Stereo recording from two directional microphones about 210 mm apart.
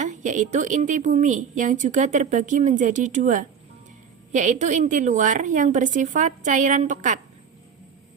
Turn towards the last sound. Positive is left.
turn(degrees=-35)  # may be behind; listen again after turning